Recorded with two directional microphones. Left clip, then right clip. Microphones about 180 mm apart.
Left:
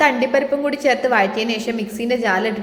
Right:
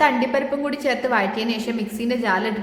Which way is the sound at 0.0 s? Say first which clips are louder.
Left 3 dB; 10° left (ahead or behind).